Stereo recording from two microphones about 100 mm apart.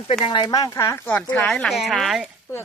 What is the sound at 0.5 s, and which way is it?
Speech, 35° left (ahead or behind).